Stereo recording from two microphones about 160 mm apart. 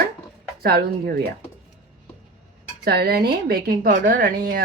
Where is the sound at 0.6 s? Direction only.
75° right (ahead or behind).